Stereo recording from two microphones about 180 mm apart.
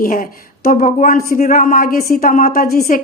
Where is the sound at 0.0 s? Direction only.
50° left (ahead or behind).